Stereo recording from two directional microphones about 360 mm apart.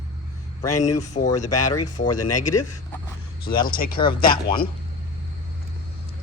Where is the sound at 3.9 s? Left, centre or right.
Centre.